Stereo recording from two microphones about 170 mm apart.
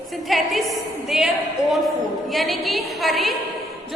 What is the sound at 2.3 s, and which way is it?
A woman's voice, centre (ahead or behind).